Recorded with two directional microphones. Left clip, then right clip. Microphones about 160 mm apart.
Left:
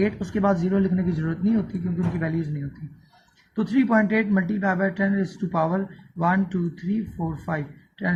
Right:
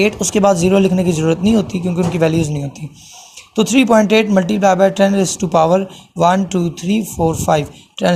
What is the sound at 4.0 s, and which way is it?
Speech, 25° right (ahead or behind).